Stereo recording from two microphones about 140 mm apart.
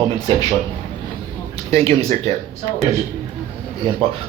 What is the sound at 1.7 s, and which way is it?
Speech, 45° right (ahead or behind).